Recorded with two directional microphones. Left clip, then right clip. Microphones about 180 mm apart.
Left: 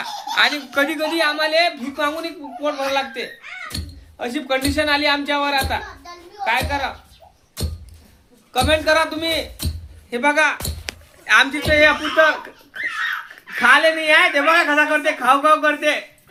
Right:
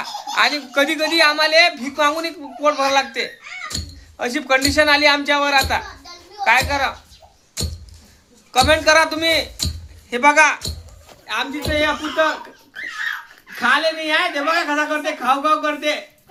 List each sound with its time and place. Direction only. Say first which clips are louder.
0.0 s speech: even; 10° right (ahead or behind)
8.5 s speech: right 3 dB; 15° right (ahead or behind)
11.7 s a woman's voice: left 4 dB; 50° left (ahead or behind)
13.6 s a woman's voice: left 4 dB; 45° left (ahead or behind)